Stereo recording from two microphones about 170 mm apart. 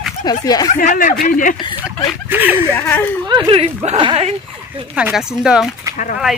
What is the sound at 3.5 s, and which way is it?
Speech, 35° right (ahead or behind).